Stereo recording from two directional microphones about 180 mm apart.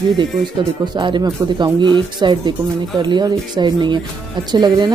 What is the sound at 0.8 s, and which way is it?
A woman's voice, 25° right (ahead or behind).